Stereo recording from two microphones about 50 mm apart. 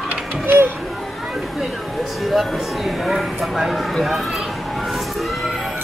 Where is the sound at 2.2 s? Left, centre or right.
Centre.